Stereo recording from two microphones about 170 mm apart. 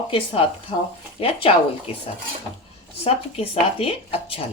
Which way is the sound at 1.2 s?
30° left (ahead or behind).